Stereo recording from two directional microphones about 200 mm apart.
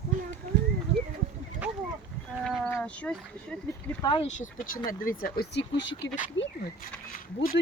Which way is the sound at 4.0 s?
25° left (ahead or behind).